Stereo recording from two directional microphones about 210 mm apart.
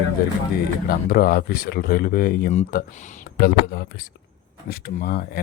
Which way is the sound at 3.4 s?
50° left (ahead or behind).